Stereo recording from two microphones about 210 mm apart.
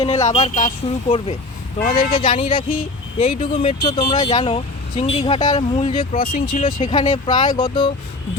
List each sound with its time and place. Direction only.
0.0 s speech: 30° left (ahead or behind)
1.8 s speech: 45° left (ahead or behind)
2.1 s speech: 25° left (ahead or behind)
6.9 s speech: 20° left (ahead or behind)